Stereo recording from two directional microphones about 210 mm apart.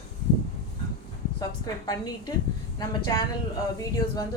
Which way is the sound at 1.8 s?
20° left (ahead or behind).